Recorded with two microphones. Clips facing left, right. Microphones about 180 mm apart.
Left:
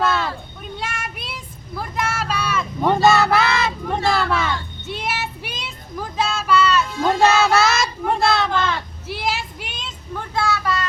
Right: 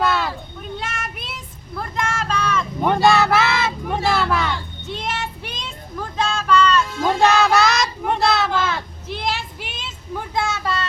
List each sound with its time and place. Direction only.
0.0 s children playing: centre (ahead or behind)
0.8 s child singing: centre (ahead or behind)
2.9 s a sound: centre (ahead or behind)
7.3 s child singing: centre (ahead or behind)
9.0 s vehicle: 5° left (ahead or behind)
10.3 s vehicle: 20° right (ahead or behind)